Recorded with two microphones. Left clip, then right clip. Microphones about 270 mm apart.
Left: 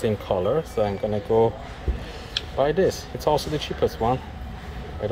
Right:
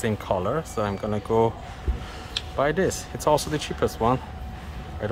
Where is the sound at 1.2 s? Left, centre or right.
Right.